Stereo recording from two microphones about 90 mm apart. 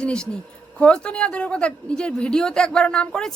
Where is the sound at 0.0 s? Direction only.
10° left (ahead or behind).